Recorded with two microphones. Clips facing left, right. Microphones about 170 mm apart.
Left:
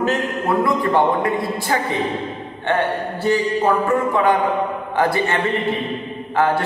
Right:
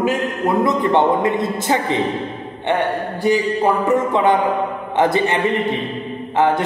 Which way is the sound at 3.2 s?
15° right (ahead or behind).